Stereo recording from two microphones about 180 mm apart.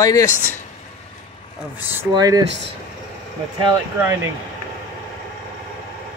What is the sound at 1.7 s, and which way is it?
Speech, 10° right (ahead or behind).